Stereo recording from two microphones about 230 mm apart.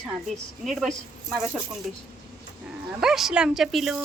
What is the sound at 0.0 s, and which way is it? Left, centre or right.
Speech, centre.